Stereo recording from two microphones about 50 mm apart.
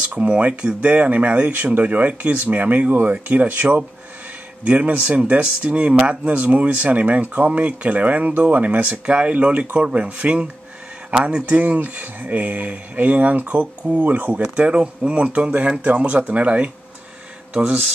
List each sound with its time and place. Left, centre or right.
0.2 s speech: right
4.6 s speech: right
9.0 s speech: right
14.4 s speech: right